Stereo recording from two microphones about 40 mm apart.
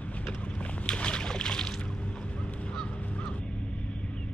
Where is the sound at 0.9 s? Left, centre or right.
Left.